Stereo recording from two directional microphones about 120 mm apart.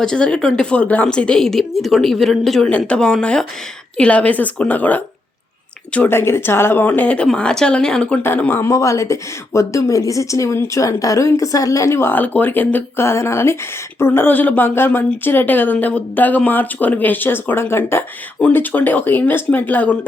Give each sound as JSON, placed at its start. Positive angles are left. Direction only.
{"t": 0.0, "sound": "speech", "side_deg": 5}
{"t": 8.2, "sound": "speech", "side_deg": 15}